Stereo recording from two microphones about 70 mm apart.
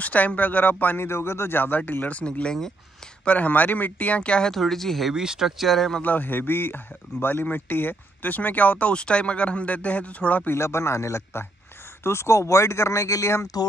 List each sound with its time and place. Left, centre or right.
0.0 s speech: left
3.3 s speech: left; by 5.1 s centre
5.1 s speech: centre
6.0 s speech: left
10.5 s a man's voice: left